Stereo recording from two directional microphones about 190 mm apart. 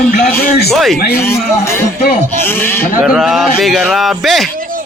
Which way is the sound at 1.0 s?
55° left (ahead or behind).